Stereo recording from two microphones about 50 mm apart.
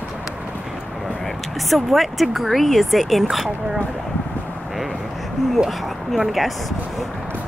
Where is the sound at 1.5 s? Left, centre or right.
Centre.